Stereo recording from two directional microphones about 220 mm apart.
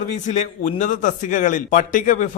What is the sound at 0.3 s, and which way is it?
A man's voice, 35° left (ahead or behind).